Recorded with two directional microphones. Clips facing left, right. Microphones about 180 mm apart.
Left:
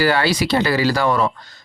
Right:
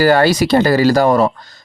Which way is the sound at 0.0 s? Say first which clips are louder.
Right 6 dB; 45° right (ahead or behind).